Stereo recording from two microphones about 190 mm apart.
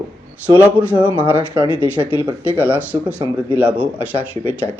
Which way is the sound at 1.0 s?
5° right (ahead or behind).